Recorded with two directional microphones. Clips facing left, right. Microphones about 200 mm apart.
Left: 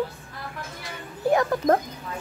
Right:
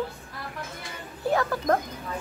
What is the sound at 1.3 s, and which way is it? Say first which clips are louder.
Speech: left 4 dB; 20° left (ahead or behind).